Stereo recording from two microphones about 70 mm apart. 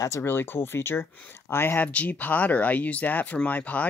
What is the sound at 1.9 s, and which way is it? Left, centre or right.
Speech, left.